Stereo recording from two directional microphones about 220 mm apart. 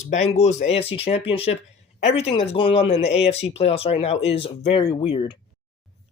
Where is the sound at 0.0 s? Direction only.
30° left (ahead or behind).